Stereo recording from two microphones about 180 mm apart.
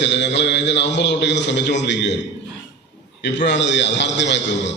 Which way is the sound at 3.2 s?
75° left (ahead or behind).